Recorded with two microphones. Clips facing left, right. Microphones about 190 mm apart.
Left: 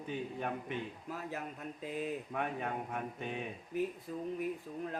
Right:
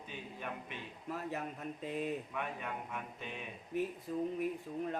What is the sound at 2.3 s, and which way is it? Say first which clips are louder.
Mantra: left 4 dB; 50° left (ahead or behind).